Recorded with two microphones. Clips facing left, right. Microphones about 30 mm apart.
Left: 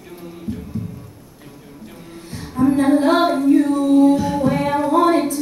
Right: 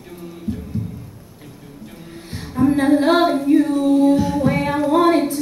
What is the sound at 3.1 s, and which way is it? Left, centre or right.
Singing, centre.